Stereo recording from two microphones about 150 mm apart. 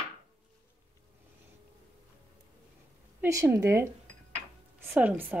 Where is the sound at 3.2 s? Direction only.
20° right (ahead or behind).